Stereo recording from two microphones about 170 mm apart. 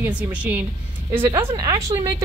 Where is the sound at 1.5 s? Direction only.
20° right (ahead or behind).